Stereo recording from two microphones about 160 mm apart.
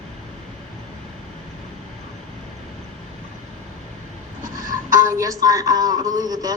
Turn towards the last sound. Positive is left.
turn(degrees=-25)  # may be behind; listen again after turning